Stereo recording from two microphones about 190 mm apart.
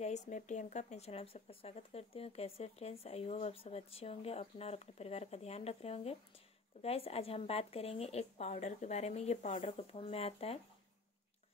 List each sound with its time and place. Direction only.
0.0 s speech: 40° left (ahead or behind)